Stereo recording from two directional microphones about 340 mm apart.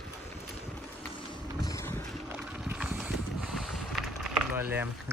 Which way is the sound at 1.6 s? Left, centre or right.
Centre.